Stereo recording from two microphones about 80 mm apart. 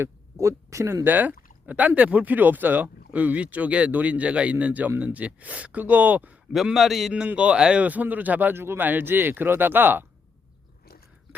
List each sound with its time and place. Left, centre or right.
0.0 s speech: right
1.0 s speech: right
6.7 s a man's voice: centre
7.1 s speech: centre